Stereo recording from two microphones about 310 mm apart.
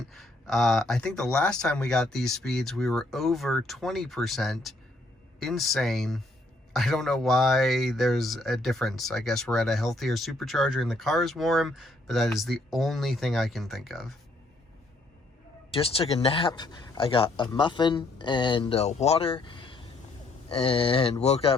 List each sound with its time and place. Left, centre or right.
0.1 s speech: centre
15.7 s speech: centre